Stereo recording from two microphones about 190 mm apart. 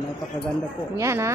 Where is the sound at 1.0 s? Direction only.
15° right (ahead or behind).